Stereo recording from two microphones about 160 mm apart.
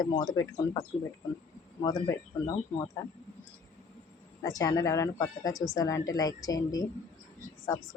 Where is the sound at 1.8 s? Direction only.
25° left (ahead or behind).